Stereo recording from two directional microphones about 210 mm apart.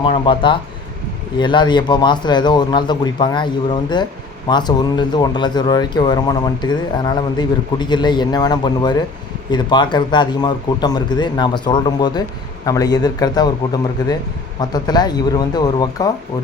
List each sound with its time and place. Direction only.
0.0 s speech: 25° left (ahead or behind)